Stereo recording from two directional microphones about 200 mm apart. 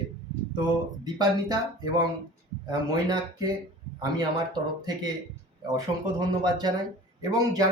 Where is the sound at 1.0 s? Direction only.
20° right (ahead or behind).